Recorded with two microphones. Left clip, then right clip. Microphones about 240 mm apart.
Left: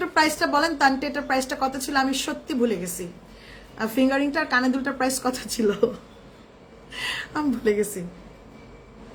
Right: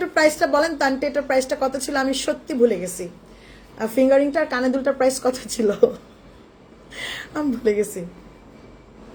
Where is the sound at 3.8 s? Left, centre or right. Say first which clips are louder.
Right 6 dB; centre.